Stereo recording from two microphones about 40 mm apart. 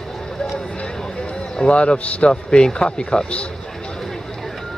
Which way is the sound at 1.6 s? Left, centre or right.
Left.